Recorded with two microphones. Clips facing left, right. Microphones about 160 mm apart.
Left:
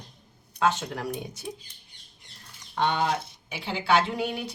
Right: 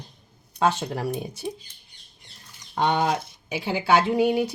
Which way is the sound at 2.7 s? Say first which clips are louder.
Right 3 dB; 45° right (ahead or behind).